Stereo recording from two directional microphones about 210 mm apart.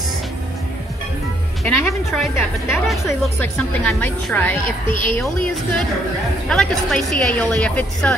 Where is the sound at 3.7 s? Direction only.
10° left (ahead or behind).